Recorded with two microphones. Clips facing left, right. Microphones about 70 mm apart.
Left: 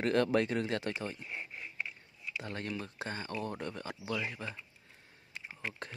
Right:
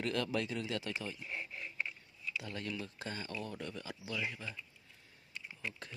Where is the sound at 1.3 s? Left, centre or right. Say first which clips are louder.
Even; centre.